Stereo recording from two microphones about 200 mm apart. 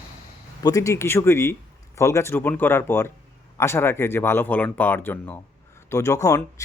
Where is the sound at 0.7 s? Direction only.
15° left (ahead or behind).